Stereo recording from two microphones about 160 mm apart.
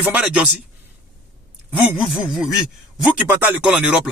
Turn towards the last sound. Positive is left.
turn(degrees=-5)  # may be behind; listen again after turning